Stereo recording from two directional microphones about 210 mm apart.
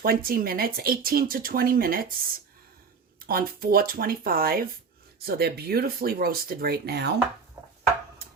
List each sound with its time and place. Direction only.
0.0 s speech: 45° right (ahead or behind)
3.2 s speech: 45° right (ahead or behind)